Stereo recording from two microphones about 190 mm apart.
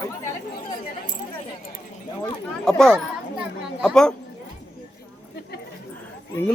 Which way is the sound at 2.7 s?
5° left (ahead or behind).